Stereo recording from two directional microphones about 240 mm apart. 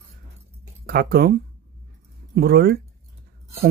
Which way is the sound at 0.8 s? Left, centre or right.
Right.